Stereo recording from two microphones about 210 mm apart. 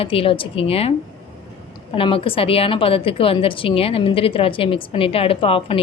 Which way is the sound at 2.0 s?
25° left (ahead or behind).